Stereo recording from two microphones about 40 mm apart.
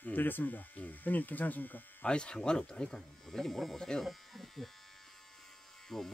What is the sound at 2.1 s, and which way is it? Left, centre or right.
Speech, left.